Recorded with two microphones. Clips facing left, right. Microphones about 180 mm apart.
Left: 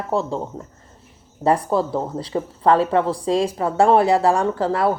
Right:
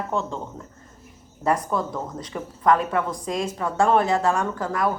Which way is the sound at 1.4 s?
30° left (ahead or behind).